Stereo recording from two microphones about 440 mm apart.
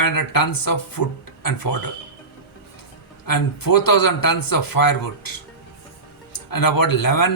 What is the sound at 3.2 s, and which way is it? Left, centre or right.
Speech, left.